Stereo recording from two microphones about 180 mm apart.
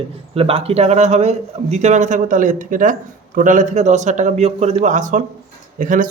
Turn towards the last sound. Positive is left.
turn(degrees=-50)  # may be behind; listen again after turning